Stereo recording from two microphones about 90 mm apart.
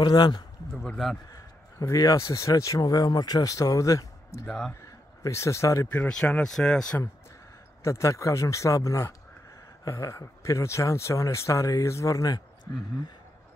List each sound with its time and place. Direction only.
0.0 s speech: 50° left (ahead or behind)
0.8 s a man's voice: centre (ahead or behind)
1.3 s a man's voice: 40° left (ahead or behind)
4.5 s speech: 10° left (ahead or behind)
4.8 s speech: 35° left (ahead or behind)
5.9 s speech: 15° left (ahead or behind)
7.8 s speech: 30° left (ahead or behind)